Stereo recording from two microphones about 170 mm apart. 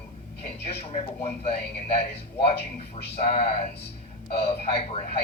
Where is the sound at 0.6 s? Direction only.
35° left (ahead or behind).